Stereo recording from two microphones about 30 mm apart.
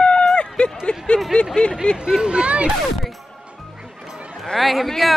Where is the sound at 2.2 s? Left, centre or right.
Right.